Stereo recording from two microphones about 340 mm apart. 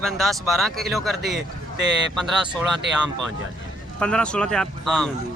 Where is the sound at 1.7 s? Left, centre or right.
Right.